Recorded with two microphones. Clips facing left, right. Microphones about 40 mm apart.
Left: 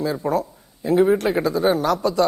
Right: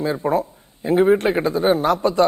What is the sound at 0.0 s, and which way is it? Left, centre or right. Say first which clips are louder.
Speech: right 2 dB; right.